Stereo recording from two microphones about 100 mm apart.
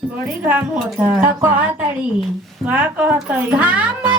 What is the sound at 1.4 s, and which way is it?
Speech, 20° right (ahead or behind).